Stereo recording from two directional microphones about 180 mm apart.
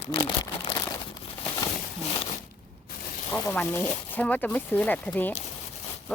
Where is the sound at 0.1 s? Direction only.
25° left (ahead or behind).